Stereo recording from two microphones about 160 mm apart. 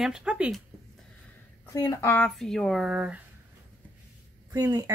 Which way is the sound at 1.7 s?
20° left (ahead or behind).